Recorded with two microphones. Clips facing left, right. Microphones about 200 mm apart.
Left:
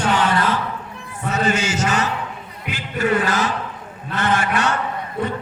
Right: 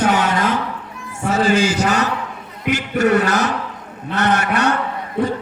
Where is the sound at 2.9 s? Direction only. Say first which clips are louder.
Right 3 dB; 70° right (ahead or behind).